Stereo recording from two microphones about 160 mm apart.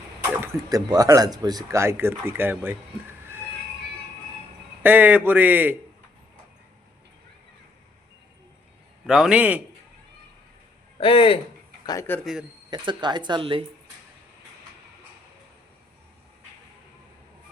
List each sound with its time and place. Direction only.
0.4 s speech: 20° right (ahead or behind)
4.8 s speech: 10° right (ahead or behind)
9.0 s a man's voice: 5° right (ahead or behind)
10.9 s speech: 35° left (ahead or behind)
11.9 s a man's voice: 15° left (ahead or behind)
12.2 s a man's voice: 5° right (ahead or behind)
12.7 s speech: 30° right (ahead or behind)